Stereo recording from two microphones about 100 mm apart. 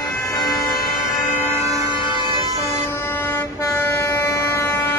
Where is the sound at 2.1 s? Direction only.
50° right (ahead or behind).